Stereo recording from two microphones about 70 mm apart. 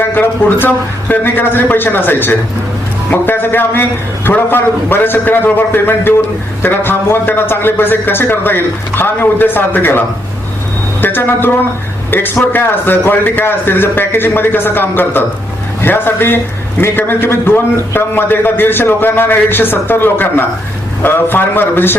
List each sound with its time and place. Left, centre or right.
0.0 s a man's voice: left
11.0 s a man's voice: left